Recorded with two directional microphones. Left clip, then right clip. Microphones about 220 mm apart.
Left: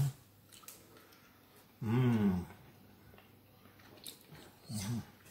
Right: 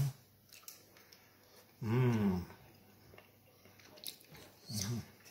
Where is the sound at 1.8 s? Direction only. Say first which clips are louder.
Left 1 dB; 15° right (ahead or behind).